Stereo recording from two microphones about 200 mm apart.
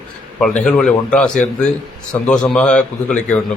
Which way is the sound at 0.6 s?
5° left (ahead or behind).